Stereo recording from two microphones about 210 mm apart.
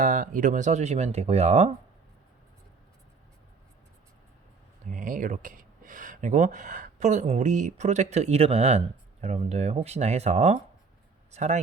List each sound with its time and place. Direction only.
0.0 s speech: 35° right (ahead or behind)
4.9 s speech: 40° right (ahead or behind)